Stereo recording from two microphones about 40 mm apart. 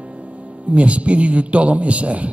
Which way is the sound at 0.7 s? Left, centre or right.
Right.